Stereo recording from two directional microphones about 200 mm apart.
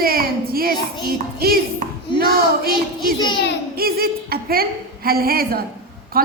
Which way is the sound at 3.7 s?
50° right (ahead or behind).